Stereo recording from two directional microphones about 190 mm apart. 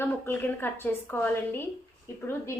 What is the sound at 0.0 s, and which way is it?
A woman's voice, 10° left (ahead or behind).